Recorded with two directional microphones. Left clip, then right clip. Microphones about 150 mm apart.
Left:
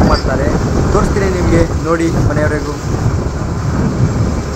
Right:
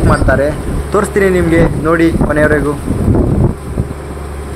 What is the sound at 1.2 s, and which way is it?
Speech, 20° right (ahead or behind).